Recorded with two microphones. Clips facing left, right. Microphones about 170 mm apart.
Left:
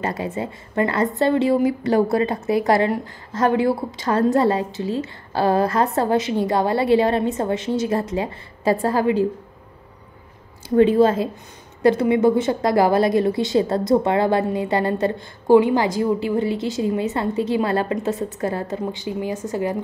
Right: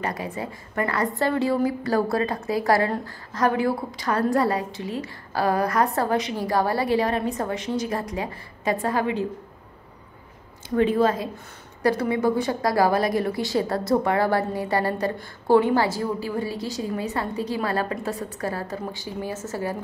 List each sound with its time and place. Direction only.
0.0 s a woman's voice: 25° left (ahead or behind)
10.8 s a woman's voice: 30° left (ahead or behind)